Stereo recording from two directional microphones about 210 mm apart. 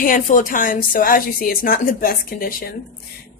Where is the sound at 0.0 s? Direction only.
40° left (ahead or behind).